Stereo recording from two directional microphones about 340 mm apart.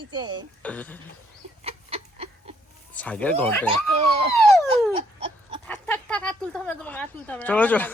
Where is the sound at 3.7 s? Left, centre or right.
Centre.